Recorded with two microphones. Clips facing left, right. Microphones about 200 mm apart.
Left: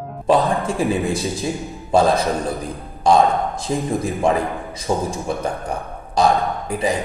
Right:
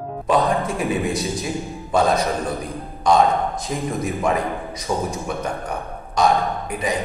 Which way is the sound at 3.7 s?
30° left (ahead or behind).